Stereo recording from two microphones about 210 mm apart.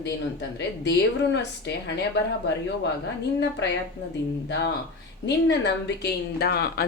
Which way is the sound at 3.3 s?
55° left (ahead or behind).